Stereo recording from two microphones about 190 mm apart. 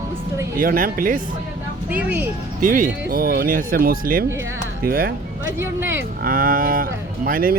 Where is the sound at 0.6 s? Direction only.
50° right (ahead or behind).